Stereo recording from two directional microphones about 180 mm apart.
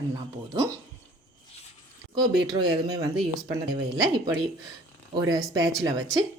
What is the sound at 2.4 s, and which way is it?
Speech, 25° right (ahead or behind).